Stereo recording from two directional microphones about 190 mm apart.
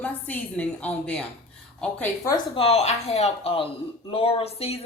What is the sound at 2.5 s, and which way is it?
Speech, 35° left (ahead or behind).